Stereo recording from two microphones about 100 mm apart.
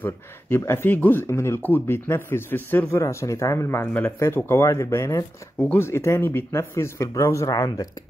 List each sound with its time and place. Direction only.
0.0 s speech: 25° left (ahead or behind)
3.8 s speech: 15° left (ahead or behind)
4.4 s speech: 25° left (ahead or behind)